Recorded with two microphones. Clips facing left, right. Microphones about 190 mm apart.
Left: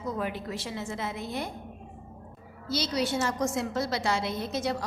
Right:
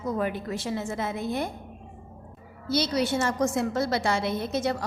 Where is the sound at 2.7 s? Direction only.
55° right (ahead or behind).